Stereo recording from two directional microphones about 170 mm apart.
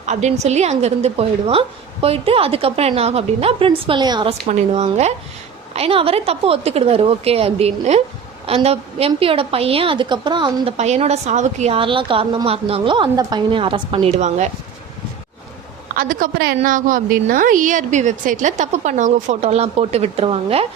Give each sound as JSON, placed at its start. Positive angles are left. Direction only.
{"t": 0.0, "sound": "a woman's voice", "side_deg": -45}
{"t": 4.4, "sound": "a woman's voice", "side_deg": -40}
{"t": 10.8, "sound": "a woman's voice", "side_deg": -40}
{"t": 14.2, "sound": "a woman's voice", "side_deg": -45}
{"t": 16.0, "sound": "a woman's voice", "side_deg": -55}
{"t": 16.6, "sound": "a woman's voice", "side_deg": -50}